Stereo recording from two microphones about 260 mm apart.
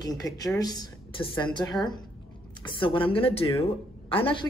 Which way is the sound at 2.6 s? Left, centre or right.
Centre.